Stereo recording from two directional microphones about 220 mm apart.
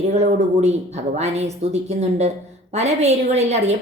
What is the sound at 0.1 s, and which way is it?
A woman's voice, 30° right (ahead or behind).